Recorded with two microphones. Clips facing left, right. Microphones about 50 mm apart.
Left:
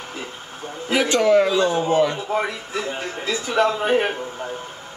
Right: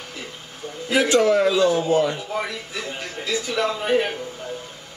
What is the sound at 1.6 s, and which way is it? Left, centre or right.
A man's voice, left.